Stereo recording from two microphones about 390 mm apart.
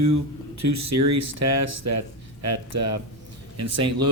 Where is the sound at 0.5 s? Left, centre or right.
Right.